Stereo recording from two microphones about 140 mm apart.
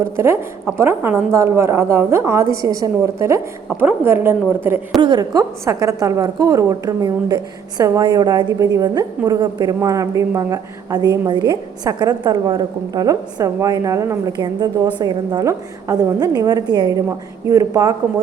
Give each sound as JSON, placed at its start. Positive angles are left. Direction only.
{"t": 0.0, "sound": "a woman's voice", "side_deg": -20}
{"t": 5.0, "sound": "a woman's voice", "side_deg": -30}